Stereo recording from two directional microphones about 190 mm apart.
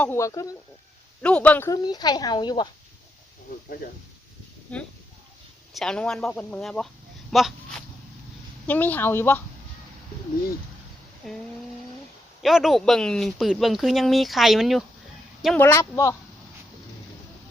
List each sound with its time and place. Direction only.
0.0 s speech: 15° left (ahead or behind)
1.2 s speech: 5° left (ahead or behind); by 2.6 s 20° left (ahead or behind)
4.7 s speech: 5° left (ahead or behind)
7.3 s a sound: centre (ahead or behind)
8.6 s speech: 10° left (ahead or behind)
12.4 s speech: centre (ahead or behind)
15.5 s speech: 10° left (ahead or behind)